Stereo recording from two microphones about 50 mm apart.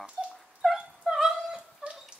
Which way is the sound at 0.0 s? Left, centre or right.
Right.